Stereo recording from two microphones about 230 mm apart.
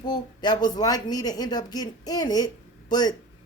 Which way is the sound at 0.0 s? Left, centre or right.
Centre.